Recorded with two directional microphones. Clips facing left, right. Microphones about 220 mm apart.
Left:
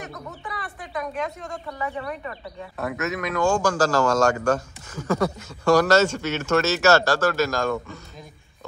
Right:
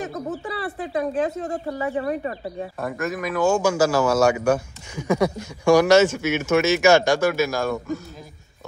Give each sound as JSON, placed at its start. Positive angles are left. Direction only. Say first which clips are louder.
{"t": 0.4, "sound": "speech", "louder": "right 8 dB", "side_deg": -30}
{"t": 2.8, "sound": "a man's voice", "louder": "even", "side_deg": 0}